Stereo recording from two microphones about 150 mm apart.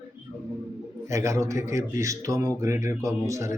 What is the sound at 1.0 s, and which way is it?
Speech, 20° right (ahead or behind).